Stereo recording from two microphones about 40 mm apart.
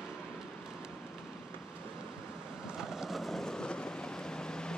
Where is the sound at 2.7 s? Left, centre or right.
Centre.